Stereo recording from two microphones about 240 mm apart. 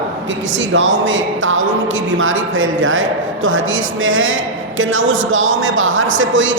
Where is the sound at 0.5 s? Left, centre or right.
Right.